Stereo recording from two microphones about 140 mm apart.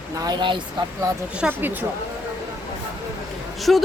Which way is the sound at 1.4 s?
10° right (ahead or behind).